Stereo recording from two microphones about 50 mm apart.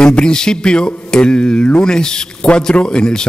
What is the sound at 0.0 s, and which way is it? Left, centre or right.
Mantra, centre.